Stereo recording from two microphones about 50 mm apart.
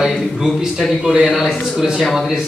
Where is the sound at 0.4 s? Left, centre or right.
Centre.